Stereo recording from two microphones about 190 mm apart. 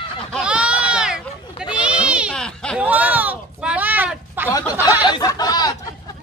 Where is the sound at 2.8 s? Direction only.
10° right (ahead or behind).